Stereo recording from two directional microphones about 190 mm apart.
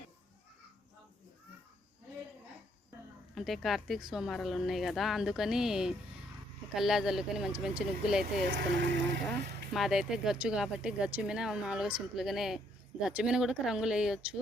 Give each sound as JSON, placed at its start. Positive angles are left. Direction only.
{"t": 3.3, "sound": "speech", "side_deg": 0}
{"t": 8.4, "sound": "speech", "side_deg": -55}
{"t": 9.7, "sound": "speech", "side_deg": 0}